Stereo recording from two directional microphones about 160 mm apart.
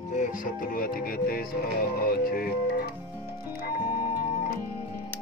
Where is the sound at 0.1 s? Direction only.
55° left (ahead or behind).